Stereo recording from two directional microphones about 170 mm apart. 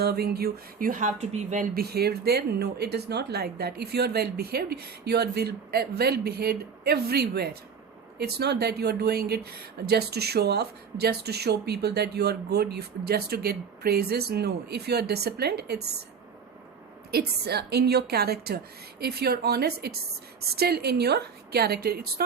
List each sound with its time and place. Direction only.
0.0 s speech: 65° right (ahead or behind); by 1.6 s 40° right (ahead or behind)
1.7 s speech: 65° right (ahead or behind)
17.1 s speech: 65° right (ahead or behind)